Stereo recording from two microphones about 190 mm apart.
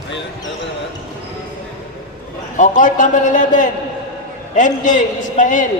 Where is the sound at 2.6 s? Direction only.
40° left (ahead or behind).